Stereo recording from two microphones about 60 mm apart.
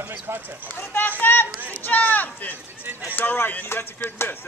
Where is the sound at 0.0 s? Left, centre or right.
Right.